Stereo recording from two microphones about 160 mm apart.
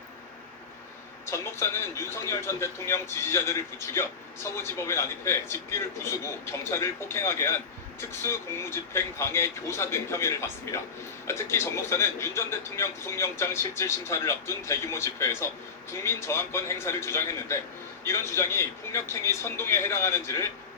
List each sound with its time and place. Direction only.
1.3 s a man's voice: 15° left (ahead or behind)